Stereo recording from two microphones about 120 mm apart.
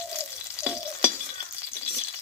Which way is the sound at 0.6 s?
5° right (ahead or behind).